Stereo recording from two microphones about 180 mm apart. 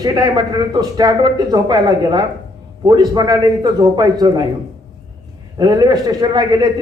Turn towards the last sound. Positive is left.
turn(degrees=-20)  # may be behind; listen again after turning